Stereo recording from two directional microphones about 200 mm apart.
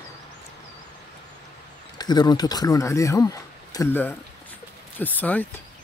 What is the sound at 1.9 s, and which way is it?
Speech, 20° left (ahead or behind).